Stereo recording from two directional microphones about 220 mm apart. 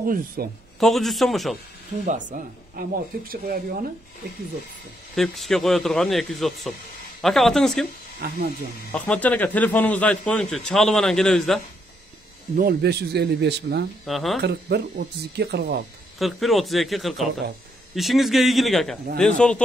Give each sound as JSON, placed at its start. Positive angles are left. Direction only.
{"t": 0.0, "sound": "speech", "side_deg": -40}
{"t": 0.7, "sound": "a man's voice", "side_deg": 0}
{"t": 2.0, "sound": "speech", "side_deg": -35}
{"t": 5.1, "sound": "a man's voice", "side_deg": 0}
{"t": 8.2, "sound": "speech", "side_deg": -45}
{"t": 8.9, "sound": "a man's voice", "side_deg": 5}
{"t": 12.5, "sound": "speech", "side_deg": -45}
{"t": 14.0, "sound": "a man's voice", "side_deg": 0}
{"t": 14.4, "sound": "speech", "side_deg": -50}
{"t": 16.2, "sound": "a man's voice", "side_deg": 0}